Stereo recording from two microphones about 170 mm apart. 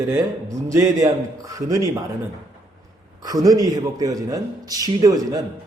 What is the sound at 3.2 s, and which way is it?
A man's voice, 20° right (ahead or behind).